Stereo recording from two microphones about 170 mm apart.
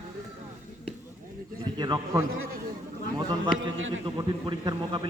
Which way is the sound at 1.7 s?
25° right (ahead or behind).